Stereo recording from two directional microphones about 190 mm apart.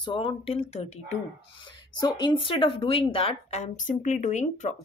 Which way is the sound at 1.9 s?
25° left (ahead or behind).